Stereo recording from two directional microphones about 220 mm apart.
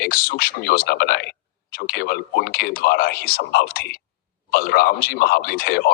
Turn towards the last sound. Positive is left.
turn(degrees=45)  # may be behind; listen again after turning